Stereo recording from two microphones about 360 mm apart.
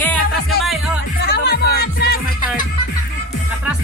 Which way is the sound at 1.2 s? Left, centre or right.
Left.